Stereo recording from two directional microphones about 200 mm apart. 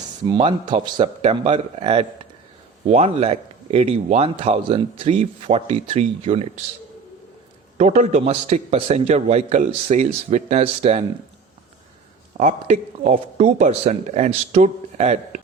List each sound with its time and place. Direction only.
0.3 s a man's voice: 25° right (ahead or behind)
7.8 s a man's voice: 35° right (ahead or behind)
12.4 s a man's voice: 35° right (ahead or behind)